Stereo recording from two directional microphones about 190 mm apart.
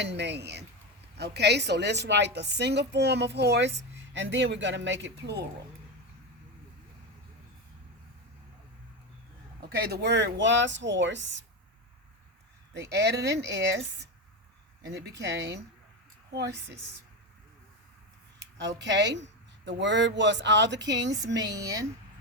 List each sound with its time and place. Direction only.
0.0 s a woman's voice: 65° right (ahead or behind)
9.6 s speech: 55° right (ahead or behind); by 11.4 s 70° right (ahead or behind)
12.9 s a woman's voice: 65° right (ahead or behind)
18.5 s speech: 70° right (ahead or behind)
21.3 s a woman's voice: 20° right (ahead or behind)